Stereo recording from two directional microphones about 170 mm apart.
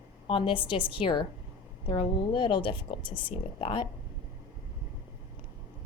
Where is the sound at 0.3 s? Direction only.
30° left (ahead or behind).